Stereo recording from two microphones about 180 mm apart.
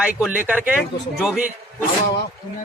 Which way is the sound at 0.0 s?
5° right (ahead or behind).